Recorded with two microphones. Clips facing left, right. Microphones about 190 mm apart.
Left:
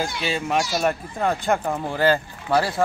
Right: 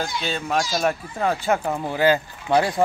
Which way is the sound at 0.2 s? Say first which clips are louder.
Left 2 dB; 5° left (ahead or behind).